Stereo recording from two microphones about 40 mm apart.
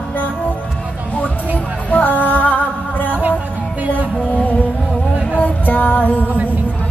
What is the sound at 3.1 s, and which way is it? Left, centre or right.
Music, right.